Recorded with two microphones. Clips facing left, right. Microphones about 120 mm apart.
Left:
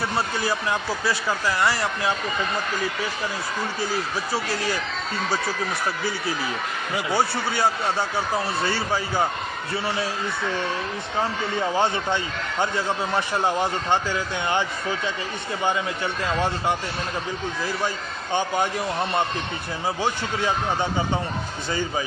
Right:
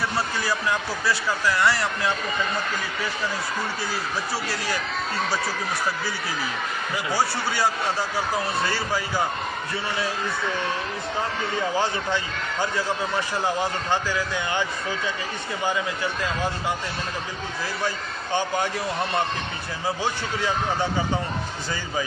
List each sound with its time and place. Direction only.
0.3 s speech: 15° left (ahead or behind)
6.9 s speech: 20° left (ahead or behind)
11.8 s speech: 25° left (ahead or behind)
20.0 s speech: 15° left (ahead or behind)
21.7 s speech: 25° left (ahead or behind)